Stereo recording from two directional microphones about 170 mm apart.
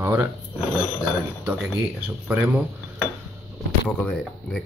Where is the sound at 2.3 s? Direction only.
10° right (ahead or behind).